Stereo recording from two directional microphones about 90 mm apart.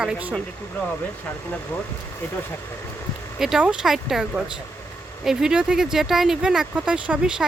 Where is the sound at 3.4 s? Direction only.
10° right (ahead or behind).